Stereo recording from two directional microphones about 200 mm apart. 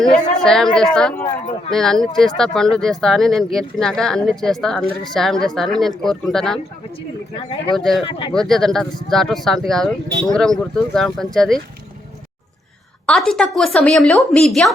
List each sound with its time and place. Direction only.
0.0 s speech: 5° left (ahead or behind)
7.3 s speech: 25° left (ahead or behind)
7.8 s speech: centre (ahead or behind)
13.1 s speech: centre (ahead or behind)